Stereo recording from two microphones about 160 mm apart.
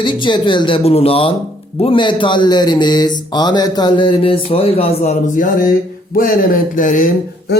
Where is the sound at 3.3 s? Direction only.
25° left (ahead or behind).